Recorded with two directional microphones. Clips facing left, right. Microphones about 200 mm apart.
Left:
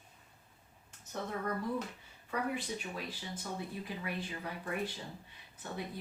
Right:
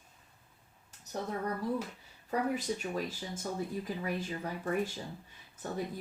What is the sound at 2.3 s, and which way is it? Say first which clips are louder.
A woman's voice: right 4 dB; 40° right (ahead or behind).